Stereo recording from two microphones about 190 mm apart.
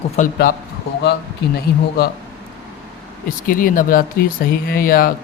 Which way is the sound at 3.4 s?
45° left (ahead or behind).